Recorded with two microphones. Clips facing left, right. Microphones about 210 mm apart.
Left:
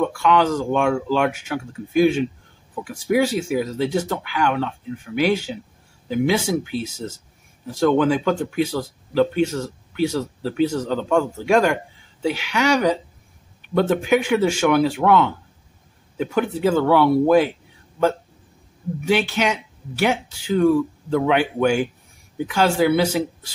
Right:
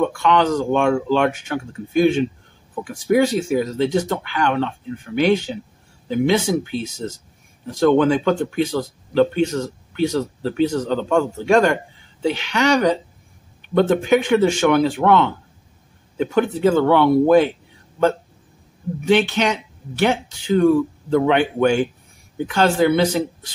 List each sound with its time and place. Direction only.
0.0 s speech: 5° left (ahead or behind)
19.0 s speech: 5° left (ahead or behind)